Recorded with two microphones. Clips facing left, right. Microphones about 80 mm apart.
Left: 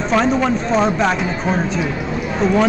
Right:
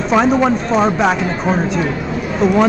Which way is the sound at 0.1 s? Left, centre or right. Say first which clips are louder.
Right 3 dB; centre.